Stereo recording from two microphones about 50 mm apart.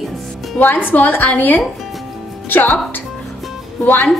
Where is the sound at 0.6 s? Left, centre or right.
Left.